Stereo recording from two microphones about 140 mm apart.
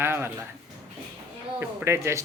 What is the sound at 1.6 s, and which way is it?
Speech, 15° right (ahead or behind).